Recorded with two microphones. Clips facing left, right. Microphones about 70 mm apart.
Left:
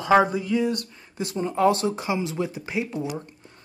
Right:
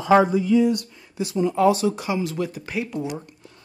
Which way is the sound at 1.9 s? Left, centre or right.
Left.